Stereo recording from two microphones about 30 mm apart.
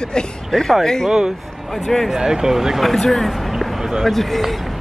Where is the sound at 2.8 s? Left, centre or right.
Centre.